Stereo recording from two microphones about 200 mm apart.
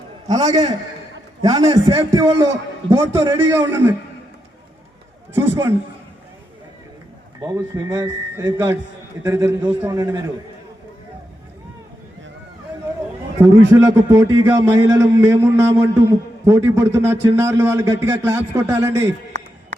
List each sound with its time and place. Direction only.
0.3 s a man's voice: 20° right (ahead or behind)
5.3 s a man's voice: 10° right (ahead or behind)
7.4 s a man's voice: 15° right (ahead or behind)
13.7 s a man's voice: 15° right (ahead or behind)